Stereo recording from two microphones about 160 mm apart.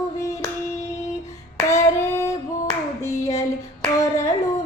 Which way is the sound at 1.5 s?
20° left (ahead or behind).